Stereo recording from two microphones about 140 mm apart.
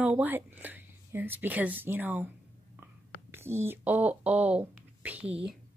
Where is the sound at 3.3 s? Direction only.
15° right (ahead or behind).